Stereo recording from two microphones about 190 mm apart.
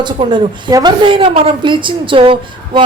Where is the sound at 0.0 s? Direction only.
25° right (ahead or behind).